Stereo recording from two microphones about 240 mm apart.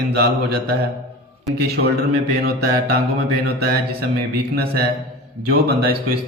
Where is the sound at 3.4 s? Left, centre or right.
Right.